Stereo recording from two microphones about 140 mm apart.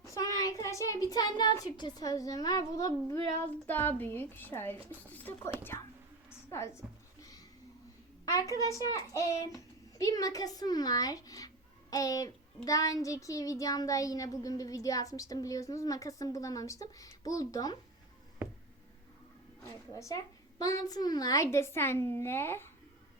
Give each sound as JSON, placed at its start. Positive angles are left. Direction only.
{"t": 0.0, "sound": "speech", "side_deg": 25}
{"t": 3.7, "sound": "a woman's voice", "side_deg": 15}
{"t": 7.2, "sound": "a sound", "side_deg": 25}
{"t": 8.2, "sound": "speech", "side_deg": 25}
{"t": 19.6, "sound": "speech", "side_deg": 20}